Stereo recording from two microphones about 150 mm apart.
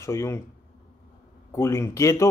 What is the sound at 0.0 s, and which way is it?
Speech, 20° left (ahead or behind).